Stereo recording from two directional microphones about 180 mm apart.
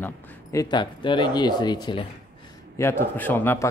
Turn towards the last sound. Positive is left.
turn(degrees=10)  # may be behind; listen again after turning